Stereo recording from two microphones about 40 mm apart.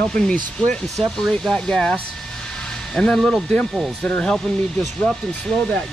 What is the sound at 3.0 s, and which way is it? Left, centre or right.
Speech, centre.